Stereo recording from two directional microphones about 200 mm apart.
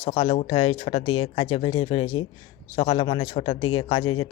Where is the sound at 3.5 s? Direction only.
90° left.